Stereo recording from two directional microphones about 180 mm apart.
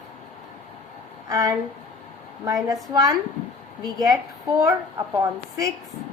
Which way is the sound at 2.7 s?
20° right (ahead or behind).